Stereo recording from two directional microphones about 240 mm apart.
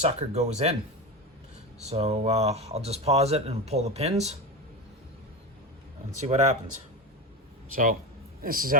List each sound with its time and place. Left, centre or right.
0.0 s speech: right
1.9 s speech: right
6.1 s speech: right
8.4 s a man's voice: right